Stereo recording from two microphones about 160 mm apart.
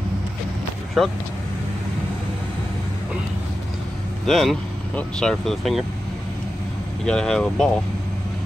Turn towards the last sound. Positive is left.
turn(degrees=5)  # may be behind; listen again after turning